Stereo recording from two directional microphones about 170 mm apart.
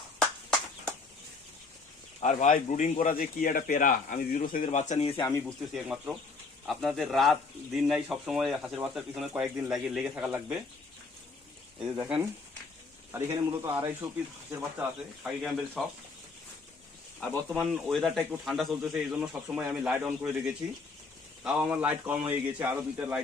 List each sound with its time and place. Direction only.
2.2 s speech: 45° left (ahead or behind)
5.5 s speech: 5° right (ahead or behind)
11.8 s a man's voice: 5° right (ahead or behind)
15.4 s speech: centre (ahead or behind)
17.2 s a man's voice: 5° right (ahead or behind)